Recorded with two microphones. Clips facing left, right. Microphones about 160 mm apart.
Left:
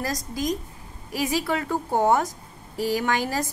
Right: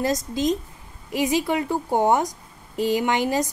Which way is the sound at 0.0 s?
20° right (ahead or behind).